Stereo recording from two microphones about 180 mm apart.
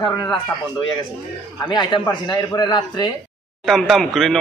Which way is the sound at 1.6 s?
25° left (ahead or behind).